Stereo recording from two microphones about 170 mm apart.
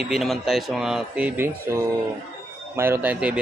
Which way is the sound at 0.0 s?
Centre (ahead or behind).